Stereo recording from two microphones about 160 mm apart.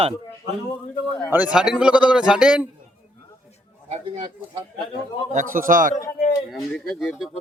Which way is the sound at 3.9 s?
30° right (ahead or behind).